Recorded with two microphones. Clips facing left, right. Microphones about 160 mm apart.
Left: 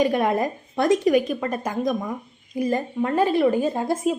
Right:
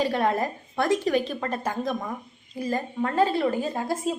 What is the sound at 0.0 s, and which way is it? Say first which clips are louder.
A woman's voice: left 4 dB; 15° left (ahead or behind).